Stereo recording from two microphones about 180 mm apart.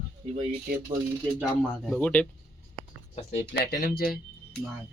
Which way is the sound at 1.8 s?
5° left (ahead or behind).